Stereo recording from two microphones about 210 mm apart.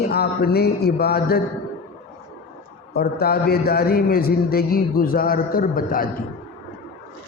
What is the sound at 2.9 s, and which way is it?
A man's voice, 45° left (ahead or behind).